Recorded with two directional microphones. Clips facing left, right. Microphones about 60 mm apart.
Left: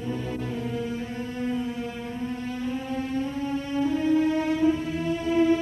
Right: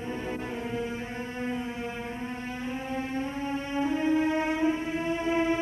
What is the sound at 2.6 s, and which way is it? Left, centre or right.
Music, right.